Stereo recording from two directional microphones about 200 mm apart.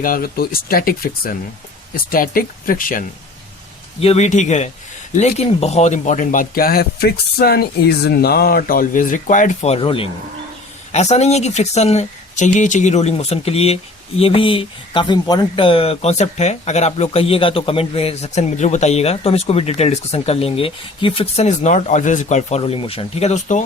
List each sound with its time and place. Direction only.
0.0 s speech: 45° left (ahead or behind)
4.0 s speech: 35° left (ahead or behind)